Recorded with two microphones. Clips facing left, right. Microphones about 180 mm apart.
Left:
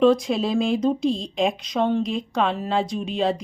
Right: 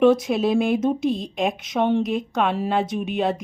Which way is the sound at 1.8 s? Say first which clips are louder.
Right 1 dB; 20° right (ahead or behind).